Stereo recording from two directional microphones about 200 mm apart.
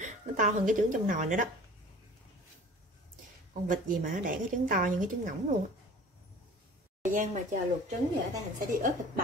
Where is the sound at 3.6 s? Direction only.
40° right (ahead or behind).